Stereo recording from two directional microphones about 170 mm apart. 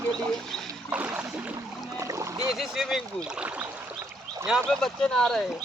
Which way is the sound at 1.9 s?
20° right (ahead or behind).